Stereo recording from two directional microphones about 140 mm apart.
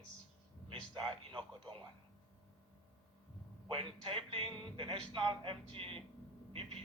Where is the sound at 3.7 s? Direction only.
40° right (ahead or behind).